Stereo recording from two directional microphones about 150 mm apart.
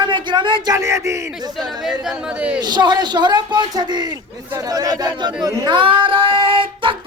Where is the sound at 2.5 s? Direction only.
30° right (ahead or behind).